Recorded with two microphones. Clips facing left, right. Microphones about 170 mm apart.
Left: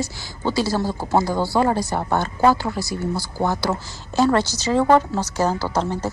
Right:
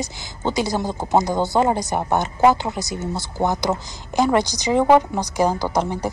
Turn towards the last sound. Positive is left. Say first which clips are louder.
# right 1 dB
turn(degrees=-15)  # may be behind; listen again after turning